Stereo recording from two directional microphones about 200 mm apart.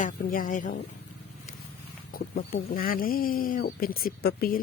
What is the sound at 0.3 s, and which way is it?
Speech, 40° left (ahead or behind).